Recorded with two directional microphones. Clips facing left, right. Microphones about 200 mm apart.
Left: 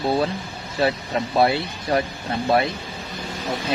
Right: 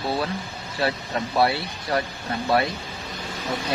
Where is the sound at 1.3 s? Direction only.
25° left (ahead or behind).